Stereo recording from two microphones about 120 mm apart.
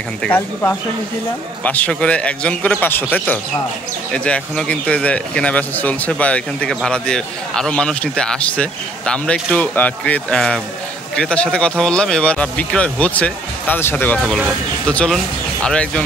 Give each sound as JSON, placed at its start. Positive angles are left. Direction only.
{"t": 0.2, "sound": "speech", "side_deg": 15}
{"t": 14.9, "sound": "speech", "side_deg": 5}